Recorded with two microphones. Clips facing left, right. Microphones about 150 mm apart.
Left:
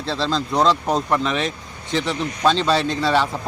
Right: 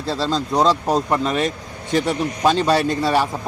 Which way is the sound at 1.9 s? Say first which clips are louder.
Right 3 dB; 15° right (ahead or behind).